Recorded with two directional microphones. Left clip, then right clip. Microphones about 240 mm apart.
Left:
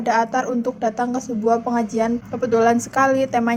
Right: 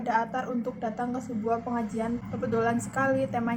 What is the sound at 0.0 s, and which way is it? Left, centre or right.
A woman's voice, left.